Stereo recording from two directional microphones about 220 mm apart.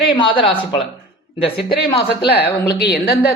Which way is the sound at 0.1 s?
25° left (ahead or behind).